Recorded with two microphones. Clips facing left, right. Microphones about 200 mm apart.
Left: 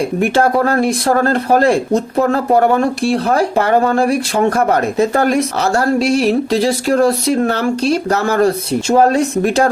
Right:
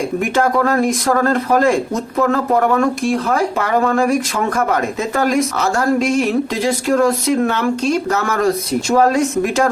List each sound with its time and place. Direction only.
0.2 s speech: 30° left (ahead or behind)